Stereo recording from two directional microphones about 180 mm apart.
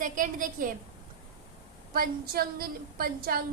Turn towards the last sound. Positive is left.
turn(degrees=-55)  # may be behind; listen again after turning